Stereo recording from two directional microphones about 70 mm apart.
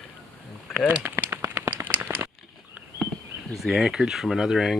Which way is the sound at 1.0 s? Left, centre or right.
Right.